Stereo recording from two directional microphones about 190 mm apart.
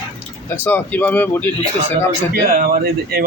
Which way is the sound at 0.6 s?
10° left (ahead or behind).